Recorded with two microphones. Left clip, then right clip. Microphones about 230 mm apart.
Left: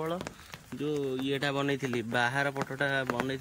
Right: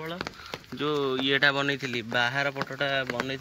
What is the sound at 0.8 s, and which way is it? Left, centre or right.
Speech, right.